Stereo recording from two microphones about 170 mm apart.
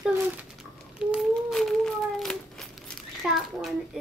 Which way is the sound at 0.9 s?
Centre (ahead or behind).